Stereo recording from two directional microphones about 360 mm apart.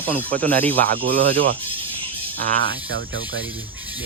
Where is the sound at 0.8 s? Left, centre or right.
Right.